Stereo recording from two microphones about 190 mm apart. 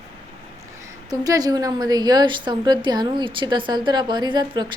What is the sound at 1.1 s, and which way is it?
A woman's voice, 20° right (ahead or behind).